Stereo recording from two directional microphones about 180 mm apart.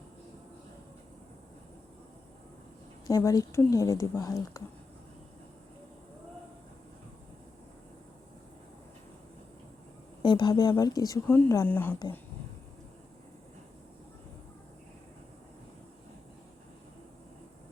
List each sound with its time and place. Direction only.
3.1 s speech: 20° left (ahead or behind)
10.2 s speech: 25° left (ahead or behind)